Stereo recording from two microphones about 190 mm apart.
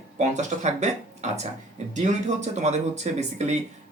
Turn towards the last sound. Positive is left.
turn(degrees=-35)  # may be behind; listen again after turning